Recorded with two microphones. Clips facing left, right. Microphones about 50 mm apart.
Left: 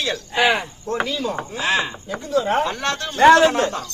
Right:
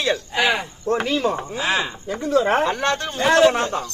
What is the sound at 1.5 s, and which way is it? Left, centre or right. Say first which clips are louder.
Chopping: left 1 dB; centre.